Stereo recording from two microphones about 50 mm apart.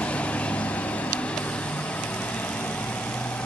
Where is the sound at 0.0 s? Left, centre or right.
Left.